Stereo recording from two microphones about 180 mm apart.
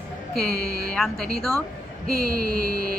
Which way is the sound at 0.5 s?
55° right (ahead or behind).